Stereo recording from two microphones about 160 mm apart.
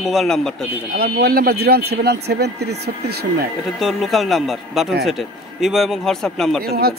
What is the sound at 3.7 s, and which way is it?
A man's voice, centre (ahead or behind).